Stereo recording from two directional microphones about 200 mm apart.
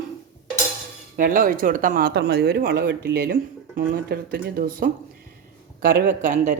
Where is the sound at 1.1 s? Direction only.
45° right (ahead or behind).